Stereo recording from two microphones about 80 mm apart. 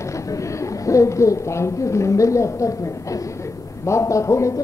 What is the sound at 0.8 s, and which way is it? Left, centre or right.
Speech, left.